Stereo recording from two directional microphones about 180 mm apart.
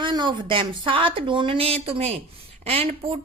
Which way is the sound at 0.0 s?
25° right (ahead or behind).